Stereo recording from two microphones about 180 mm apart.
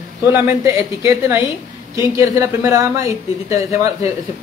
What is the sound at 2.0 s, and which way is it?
A woman's voice, 20° right (ahead or behind).